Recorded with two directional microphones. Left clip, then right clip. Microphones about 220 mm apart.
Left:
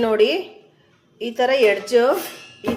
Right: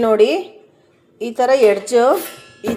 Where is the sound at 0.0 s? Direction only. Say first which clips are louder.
Right 4 dB; 15° right (ahead or behind).